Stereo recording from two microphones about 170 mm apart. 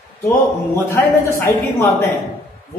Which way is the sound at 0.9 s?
15° left (ahead or behind).